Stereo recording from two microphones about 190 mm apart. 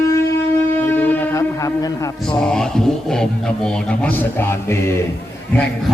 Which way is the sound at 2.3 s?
5° left (ahead or behind).